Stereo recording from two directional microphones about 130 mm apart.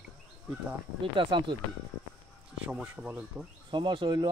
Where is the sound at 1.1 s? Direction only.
40° right (ahead or behind).